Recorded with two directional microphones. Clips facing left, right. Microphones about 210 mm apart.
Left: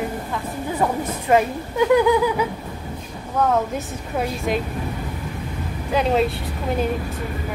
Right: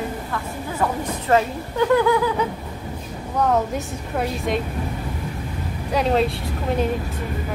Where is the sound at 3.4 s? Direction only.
Centre (ahead or behind).